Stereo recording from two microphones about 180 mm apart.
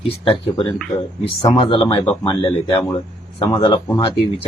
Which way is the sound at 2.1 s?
10° left (ahead or behind).